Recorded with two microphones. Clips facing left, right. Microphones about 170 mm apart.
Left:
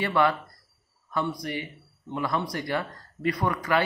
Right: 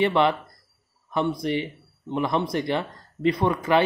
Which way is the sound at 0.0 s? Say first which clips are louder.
Right 3 dB; 20° right (ahead or behind).